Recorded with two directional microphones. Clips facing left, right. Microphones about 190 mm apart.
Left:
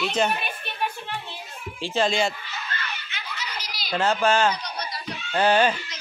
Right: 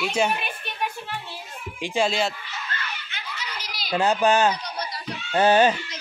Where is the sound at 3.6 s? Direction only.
55° right (ahead or behind).